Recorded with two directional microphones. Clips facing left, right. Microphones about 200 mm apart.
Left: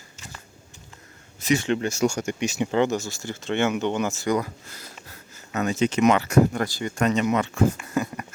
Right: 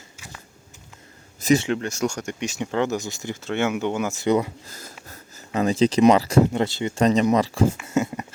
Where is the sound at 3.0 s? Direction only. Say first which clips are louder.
Right 1 dB; 20° right (ahead or behind).